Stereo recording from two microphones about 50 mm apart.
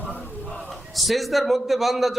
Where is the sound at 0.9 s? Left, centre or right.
Centre.